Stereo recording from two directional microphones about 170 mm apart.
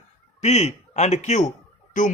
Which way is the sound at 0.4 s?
40° left (ahead or behind).